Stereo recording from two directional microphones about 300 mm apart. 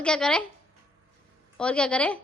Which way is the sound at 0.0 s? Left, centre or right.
Centre.